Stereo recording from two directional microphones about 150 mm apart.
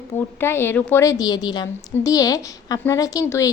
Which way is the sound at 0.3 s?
15° left (ahead or behind).